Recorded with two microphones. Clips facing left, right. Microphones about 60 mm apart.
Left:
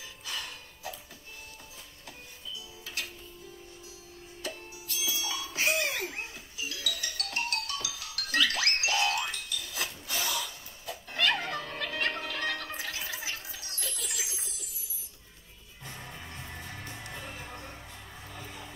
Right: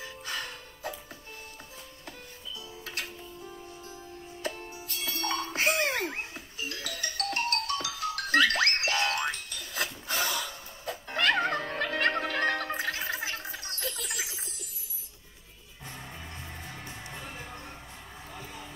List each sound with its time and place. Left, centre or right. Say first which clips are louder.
0.0 s music: right 3 dB; right
2.8 s music: right 1 dB; right
4.4 s music: right 4 dB; right
17.0 s music: even; centre